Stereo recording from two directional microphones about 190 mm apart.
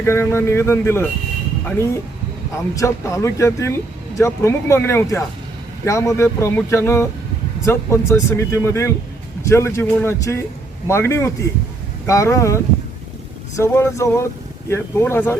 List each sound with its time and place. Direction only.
0.0 s speech: 10° left (ahead or behind)
13.6 s speech: 15° left (ahead or behind)